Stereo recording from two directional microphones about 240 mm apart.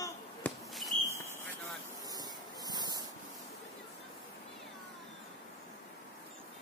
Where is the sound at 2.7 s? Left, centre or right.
Centre.